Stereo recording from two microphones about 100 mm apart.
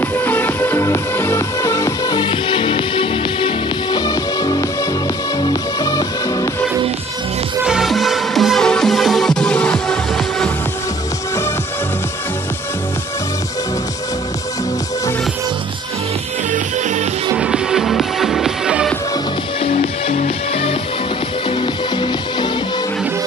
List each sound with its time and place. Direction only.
0.0 s music: 20° left (ahead or behind)
2.1 s music: 55° left (ahead or behind); by 6.5 s 40° left (ahead or behind)
7.6 s music: 5° right (ahead or behind)
17.4 s music: 5° right (ahead or behind)
19.6 s music: 90° left
21.5 s music: 60° left (ahead or behind)